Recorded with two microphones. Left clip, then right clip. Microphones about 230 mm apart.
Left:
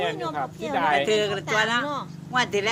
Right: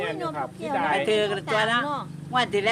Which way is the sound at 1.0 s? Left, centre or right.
Centre.